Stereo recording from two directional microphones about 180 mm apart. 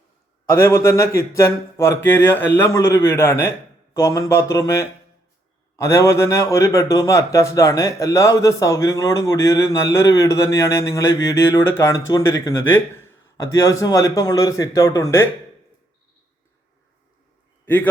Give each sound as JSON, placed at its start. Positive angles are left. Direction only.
{"t": 0.4, "sound": "a man's voice", "side_deg": 15}